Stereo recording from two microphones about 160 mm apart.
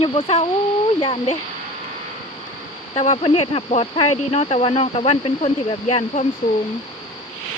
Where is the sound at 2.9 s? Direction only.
45° left (ahead or behind).